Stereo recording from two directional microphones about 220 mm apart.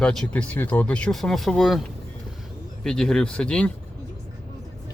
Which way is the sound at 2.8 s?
5° left (ahead or behind).